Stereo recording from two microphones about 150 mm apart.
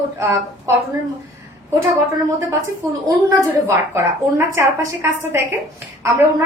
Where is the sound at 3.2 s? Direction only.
20° right (ahead or behind).